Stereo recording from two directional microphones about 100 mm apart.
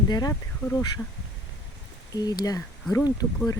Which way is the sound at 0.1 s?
40° left (ahead or behind).